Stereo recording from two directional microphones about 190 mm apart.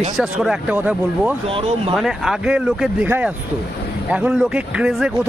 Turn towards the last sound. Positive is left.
turn(degrees=-5)  # may be behind; listen again after turning